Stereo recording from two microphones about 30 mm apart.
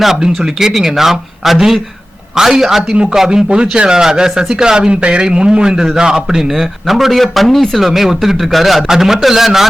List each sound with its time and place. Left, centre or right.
0.2 s speech: centre
2.9 s a man's voice: right
6.5 s speech: centre
7.8 s speech: centre